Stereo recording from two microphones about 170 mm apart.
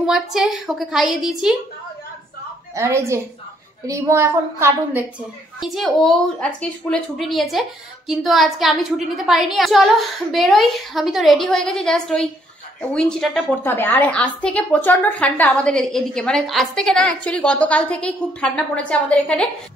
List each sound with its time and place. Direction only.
0.0 s a woman's voice: 5° right (ahead or behind)
2.7 s a woman's voice: 15° right (ahead or behind)
5.6 s a woman's voice: centre (ahead or behind)